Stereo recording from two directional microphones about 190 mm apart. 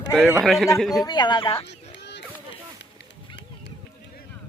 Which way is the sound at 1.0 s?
25° left (ahead or behind).